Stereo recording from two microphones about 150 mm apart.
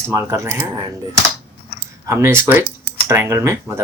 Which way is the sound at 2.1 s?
20° right (ahead or behind).